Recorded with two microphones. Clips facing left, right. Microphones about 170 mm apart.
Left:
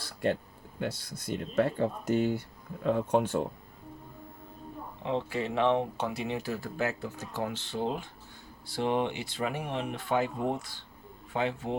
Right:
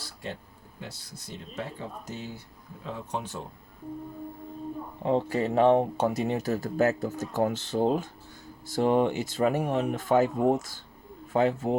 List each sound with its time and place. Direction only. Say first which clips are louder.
0.0 s a sound: left 9 dB; 55° left (ahead or behind)
1.3 s speech: left 9 dB; 60° left (ahead or behind)
5.0 s speech: right 6 dB; 40° right (ahead or behind)